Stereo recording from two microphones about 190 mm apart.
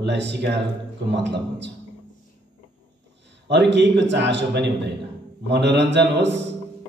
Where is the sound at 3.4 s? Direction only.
65° right (ahead or behind).